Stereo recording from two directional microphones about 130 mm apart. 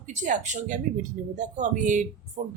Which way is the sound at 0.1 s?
70° right (ahead or behind).